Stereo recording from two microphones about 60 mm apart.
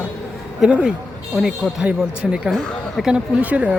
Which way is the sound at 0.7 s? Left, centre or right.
Centre.